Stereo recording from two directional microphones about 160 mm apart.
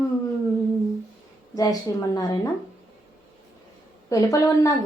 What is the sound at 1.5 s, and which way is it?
Speech, 25° left (ahead or behind).